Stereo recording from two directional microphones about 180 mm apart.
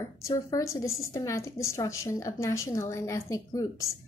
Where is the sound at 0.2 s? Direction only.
20° left (ahead or behind).